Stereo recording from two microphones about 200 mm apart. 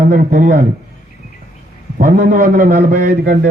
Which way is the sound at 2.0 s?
45° right (ahead or behind).